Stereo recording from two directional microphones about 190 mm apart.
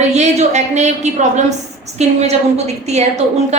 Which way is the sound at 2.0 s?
35° right (ahead or behind).